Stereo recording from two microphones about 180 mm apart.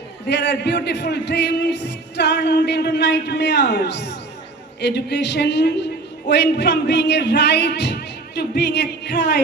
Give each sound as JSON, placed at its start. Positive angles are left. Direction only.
{"t": 0.3, "sound": "speech", "side_deg": 70}